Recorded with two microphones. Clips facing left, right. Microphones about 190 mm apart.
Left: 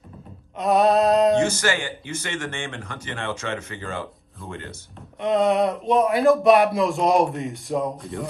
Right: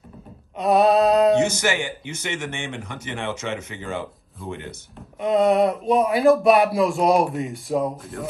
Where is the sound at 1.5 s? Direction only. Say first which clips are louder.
Right 1 dB; 15° right (ahead or behind).